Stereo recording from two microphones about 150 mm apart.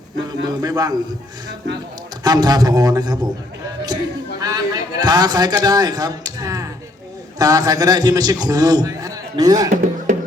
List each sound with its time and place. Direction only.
0.3 s a man's voice: 25° right (ahead or behind)
2.2 s a man's voice: 25° right (ahead or behind)
4.4 s a man's voice: 25° right (ahead or behind)
9.6 s speech: 55° right (ahead or behind)